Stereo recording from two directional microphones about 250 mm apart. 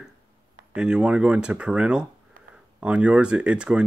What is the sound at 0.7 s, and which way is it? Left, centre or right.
Speech, centre.